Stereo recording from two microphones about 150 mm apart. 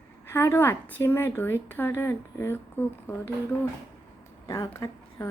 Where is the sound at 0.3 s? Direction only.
15° left (ahead or behind).